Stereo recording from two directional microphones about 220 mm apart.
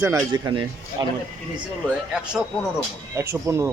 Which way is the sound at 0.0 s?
15° right (ahead or behind).